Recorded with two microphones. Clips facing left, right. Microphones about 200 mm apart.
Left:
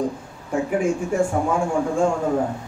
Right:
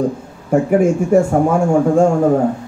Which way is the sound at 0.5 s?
45° right (ahead or behind).